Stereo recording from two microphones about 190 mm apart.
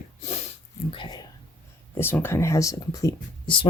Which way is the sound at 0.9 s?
25° left (ahead or behind).